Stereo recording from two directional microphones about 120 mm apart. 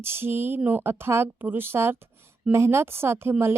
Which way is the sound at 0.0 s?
20° right (ahead or behind).